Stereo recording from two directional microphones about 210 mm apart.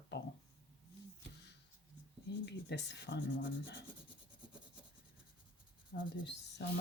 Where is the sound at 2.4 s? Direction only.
55° left (ahead or behind).